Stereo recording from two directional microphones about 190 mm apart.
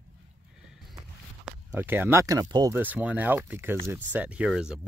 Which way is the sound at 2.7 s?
10° right (ahead or behind).